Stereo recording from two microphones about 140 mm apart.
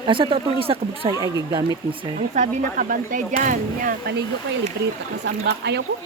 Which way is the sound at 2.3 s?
70° right (ahead or behind).